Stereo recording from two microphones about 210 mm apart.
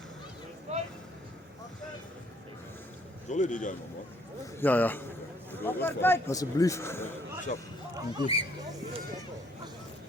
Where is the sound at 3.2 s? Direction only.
35° left (ahead or behind).